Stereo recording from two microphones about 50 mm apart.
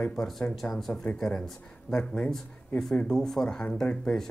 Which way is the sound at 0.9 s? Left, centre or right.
Left.